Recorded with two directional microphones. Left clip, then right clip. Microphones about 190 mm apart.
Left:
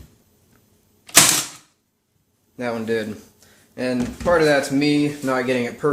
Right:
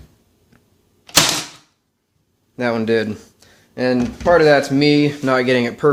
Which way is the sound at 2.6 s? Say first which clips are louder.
Right 6 dB; 45° right (ahead or behind).